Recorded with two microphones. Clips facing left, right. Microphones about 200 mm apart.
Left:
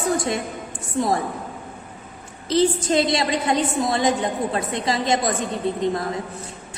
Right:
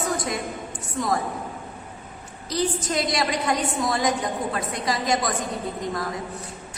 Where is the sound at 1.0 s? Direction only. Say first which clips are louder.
Left 5 dB; 30° left (ahead or behind).